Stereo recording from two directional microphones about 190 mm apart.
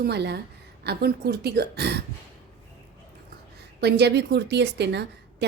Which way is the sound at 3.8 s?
60° right (ahead or behind).